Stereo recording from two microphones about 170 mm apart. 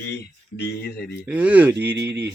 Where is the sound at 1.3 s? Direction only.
10° right (ahead or behind).